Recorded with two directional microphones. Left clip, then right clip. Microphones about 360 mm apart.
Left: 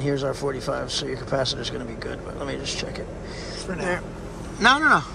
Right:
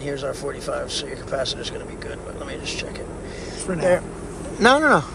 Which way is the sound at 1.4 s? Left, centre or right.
Left.